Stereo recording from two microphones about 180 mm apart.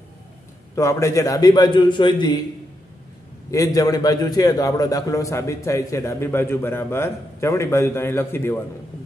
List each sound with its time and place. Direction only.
0.7 s a man's voice: 15° left (ahead or behind)
3.5 s a man's voice: 20° left (ahead or behind)